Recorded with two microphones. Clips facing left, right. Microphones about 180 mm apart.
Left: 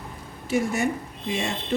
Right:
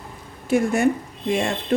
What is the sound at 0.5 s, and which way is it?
Speech, 55° right (ahead or behind).